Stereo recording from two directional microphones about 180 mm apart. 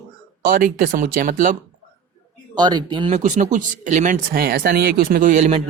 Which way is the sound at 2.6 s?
25° right (ahead or behind).